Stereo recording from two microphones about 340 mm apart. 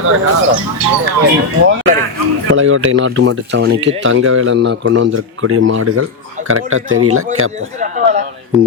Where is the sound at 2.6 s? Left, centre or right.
Right.